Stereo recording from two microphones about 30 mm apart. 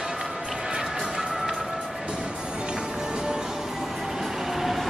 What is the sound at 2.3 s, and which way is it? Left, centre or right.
Music, right.